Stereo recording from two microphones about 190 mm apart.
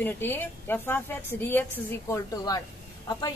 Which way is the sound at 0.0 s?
10° left (ahead or behind).